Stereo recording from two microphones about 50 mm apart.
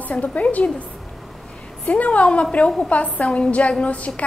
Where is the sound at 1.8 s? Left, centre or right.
Left.